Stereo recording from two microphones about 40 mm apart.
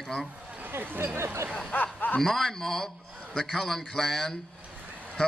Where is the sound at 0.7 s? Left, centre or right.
Right.